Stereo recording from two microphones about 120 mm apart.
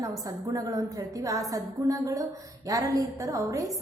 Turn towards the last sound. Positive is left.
turn(degrees=-25)  # may be behind; listen again after turning